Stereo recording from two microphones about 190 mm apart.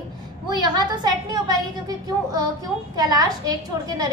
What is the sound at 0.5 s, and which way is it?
A woman's voice, 20° right (ahead or behind).